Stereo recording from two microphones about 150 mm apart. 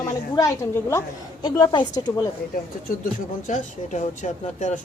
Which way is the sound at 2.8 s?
60° left (ahead or behind).